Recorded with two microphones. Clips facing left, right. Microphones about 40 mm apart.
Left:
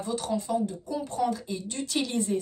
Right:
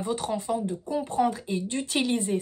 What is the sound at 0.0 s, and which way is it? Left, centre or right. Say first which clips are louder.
A woman's voice: right 1 dB; right.